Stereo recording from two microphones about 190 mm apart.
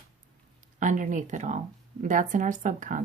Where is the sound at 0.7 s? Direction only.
40° right (ahead or behind).